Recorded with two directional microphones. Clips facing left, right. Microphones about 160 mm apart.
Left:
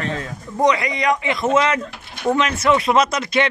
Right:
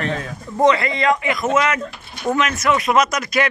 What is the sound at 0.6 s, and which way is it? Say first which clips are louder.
Speech: right 2 dB; 15° left (ahead or behind).